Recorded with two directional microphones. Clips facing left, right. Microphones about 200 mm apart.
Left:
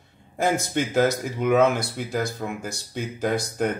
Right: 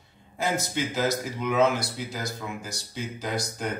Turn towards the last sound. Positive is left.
turn(degrees=55)  # may be behind; listen again after turning